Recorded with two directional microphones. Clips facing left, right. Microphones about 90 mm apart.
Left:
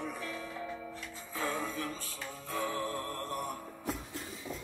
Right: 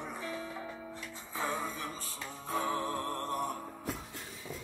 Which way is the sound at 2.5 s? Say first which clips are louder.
Right 2 dB; 25° right (ahead or behind).